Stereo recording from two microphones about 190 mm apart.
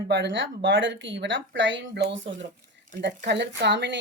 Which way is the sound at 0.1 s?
65° right (ahead or behind).